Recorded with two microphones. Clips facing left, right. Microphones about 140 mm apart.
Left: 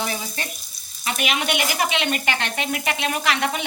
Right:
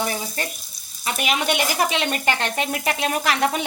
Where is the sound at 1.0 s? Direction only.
35° right (ahead or behind).